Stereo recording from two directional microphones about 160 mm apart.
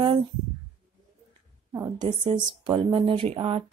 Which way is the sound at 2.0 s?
30° right (ahead or behind).